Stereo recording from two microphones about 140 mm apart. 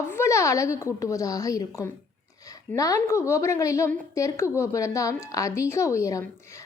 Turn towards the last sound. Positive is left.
turn(degrees=20)  # may be behind; listen again after turning